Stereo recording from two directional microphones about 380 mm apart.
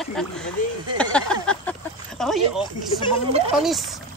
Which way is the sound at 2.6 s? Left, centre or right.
Centre.